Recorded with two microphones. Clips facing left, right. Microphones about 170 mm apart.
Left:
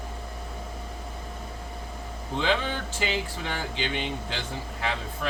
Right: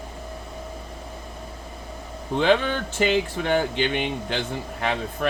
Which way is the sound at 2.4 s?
60° right (ahead or behind).